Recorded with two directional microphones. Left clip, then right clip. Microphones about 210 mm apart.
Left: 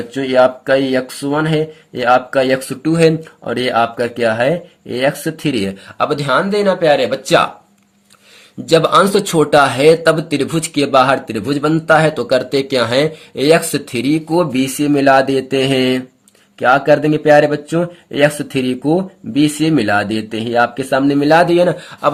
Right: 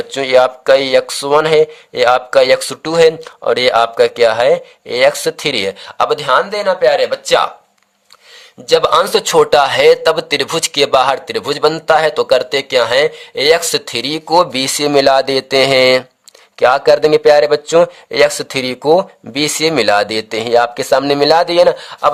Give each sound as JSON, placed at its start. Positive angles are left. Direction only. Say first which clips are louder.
{"t": 0.2, "sound": "speech", "louder": "right 1 dB", "side_deg": -50}
{"t": 6.1, "sound": "speech", "louder": "right 2 dB", "side_deg": -25}
{"t": 8.6, "sound": "speech", "louder": "even", "side_deg": -30}